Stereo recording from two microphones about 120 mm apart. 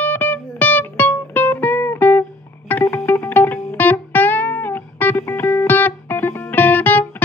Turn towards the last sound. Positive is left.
turn(degrees=15)  # may be behind; listen again after turning